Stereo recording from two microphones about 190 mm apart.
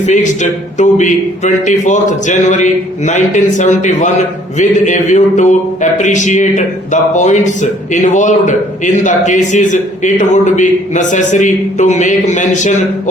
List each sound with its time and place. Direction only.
0.0 s speech: 40° left (ahead or behind)